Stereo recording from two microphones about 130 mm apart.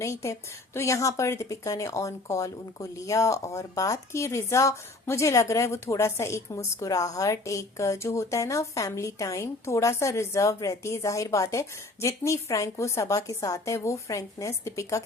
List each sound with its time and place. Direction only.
0.0 s a woman's voice: 20° left (ahead or behind)